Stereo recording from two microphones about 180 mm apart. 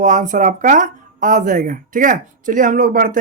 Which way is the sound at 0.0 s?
45° right (ahead or behind).